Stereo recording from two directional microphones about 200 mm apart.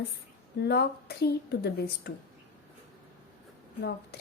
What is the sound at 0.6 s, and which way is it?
A woman's voice, 55° left (ahead or behind).